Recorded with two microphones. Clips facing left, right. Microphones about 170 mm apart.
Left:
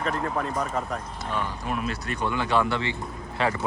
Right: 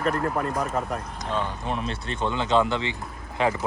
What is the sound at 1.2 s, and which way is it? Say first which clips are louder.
Speech: right 2 dB; 20° right (ahead or behind).